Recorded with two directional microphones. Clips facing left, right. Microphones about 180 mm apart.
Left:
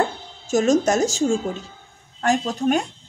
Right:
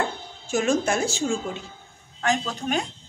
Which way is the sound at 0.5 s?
40° left (ahead or behind).